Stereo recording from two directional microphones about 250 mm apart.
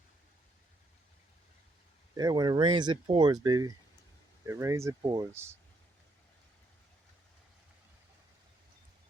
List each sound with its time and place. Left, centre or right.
2.1 s speech: centre